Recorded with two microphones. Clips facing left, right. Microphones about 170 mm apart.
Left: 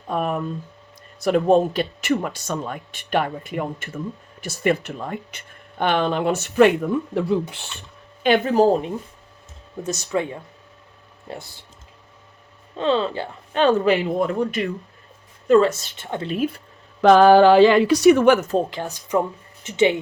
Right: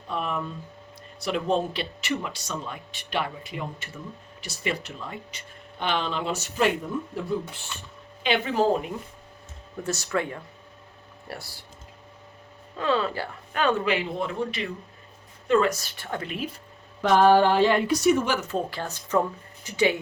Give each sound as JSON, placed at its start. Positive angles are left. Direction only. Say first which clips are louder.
{"t": 0.1, "sound": "speech", "louder": "left 6 dB", "side_deg": 50}
{"t": 8.4, "sound": "speech", "louder": "left 4 dB", "side_deg": 35}
{"t": 9.8, "sound": "speech", "louder": "left 3 dB", "side_deg": 20}
{"t": 12.7, "sound": "speech", "louder": "left 4 dB", "side_deg": 25}
{"t": 15.7, "sound": "speech", "louder": "left 3 dB", "side_deg": 20}
{"t": 16.3, "sound": "speech", "louder": "left 9 dB", "side_deg": 50}
{"t": 17.0, "sound": "speech", "louder": "left 6 dB", "side_deg": 90}
{"t": 18.3, "sound": "speech", "louder": "left 7 dB", "side_deg": 40}
{"t": 18.7, "sound": "speech", "louder": "left 3 dB", "side_deg": 15}